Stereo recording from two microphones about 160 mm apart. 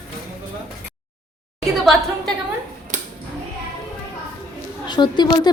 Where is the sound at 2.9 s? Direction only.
55° right (ahead or behind).